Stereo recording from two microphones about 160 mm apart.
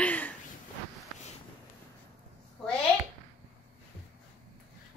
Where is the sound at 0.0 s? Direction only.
10° left (ahead or behind).